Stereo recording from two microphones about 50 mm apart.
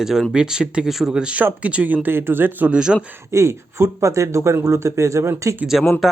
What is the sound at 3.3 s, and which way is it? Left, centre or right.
Speech, right.